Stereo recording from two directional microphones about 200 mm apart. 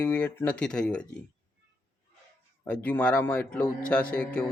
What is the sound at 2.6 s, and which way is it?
Speech, 5° left (ahead or behind).